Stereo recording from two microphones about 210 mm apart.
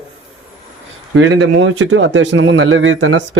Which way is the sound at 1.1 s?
65° right (ahead or behind).